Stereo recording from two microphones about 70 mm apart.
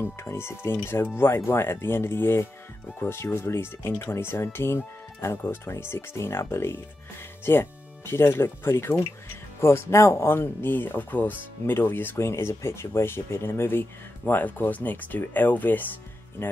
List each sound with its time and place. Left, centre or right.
0.0 s speech: left